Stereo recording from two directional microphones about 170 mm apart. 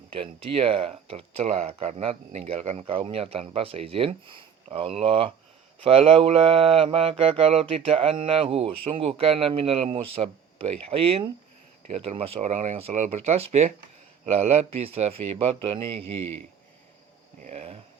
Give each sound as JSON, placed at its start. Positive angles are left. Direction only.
{"t": 0.1, "sound": "speech", "side_deg": -30}
{"t": 17.4, "sound": "speech", "side_deg": -40}